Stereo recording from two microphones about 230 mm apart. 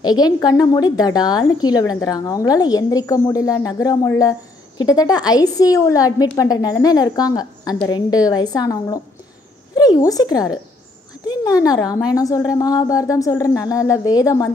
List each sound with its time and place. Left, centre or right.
0.0 s a woman's voice: centre